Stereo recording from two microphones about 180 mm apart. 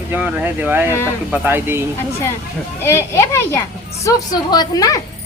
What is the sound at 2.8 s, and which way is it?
A woman's voice, 15° left (ahead or behind).